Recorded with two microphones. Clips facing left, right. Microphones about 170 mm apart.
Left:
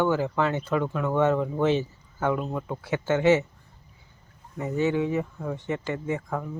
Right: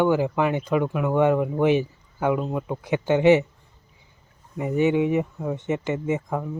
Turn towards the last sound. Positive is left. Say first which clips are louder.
# right 4 dB
turn(degrees=-15)  # may be behind; listen again after turning